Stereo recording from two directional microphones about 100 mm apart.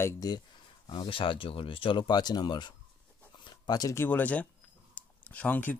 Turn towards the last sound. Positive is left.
turn(degrees=15)  # may be behind; listen again after turning